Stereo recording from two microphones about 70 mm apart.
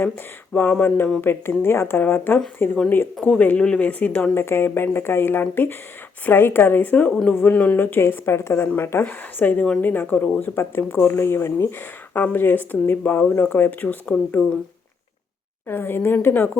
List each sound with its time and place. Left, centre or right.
0.5 s speech: left
3.2 s speech: centre
4.4 s speech: left
10.4 s speech: left
15.6 s speech: left